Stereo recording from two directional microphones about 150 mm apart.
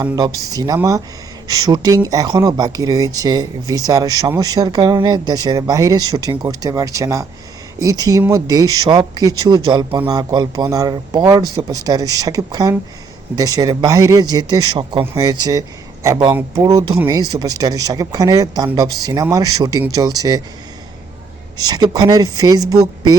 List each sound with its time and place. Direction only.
0.0 s speech: 25° right (ahead or behind)
21.6 s speech: 25° right (ahead or behind)